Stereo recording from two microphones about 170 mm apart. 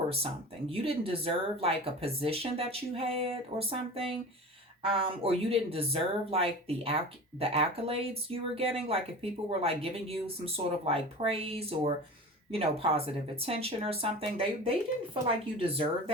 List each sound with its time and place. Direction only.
0.7 s speech: 35° right (ahead or behind)